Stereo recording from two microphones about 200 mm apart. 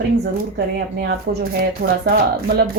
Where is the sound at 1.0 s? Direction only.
55° right (ahead or behind).